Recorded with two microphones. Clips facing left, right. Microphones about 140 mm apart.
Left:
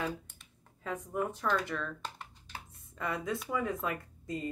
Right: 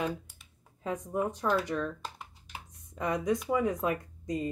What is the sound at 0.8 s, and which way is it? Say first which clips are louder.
Speech: right 3 dB; 20° right (ahead or behind).